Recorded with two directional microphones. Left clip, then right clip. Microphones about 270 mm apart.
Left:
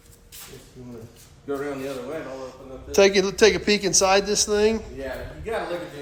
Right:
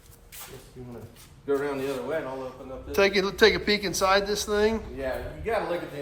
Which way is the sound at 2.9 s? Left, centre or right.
Centre.